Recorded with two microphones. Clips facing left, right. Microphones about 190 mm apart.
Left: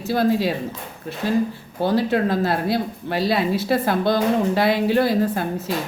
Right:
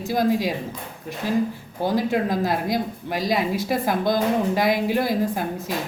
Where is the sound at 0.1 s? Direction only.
15° right (ahead or behind).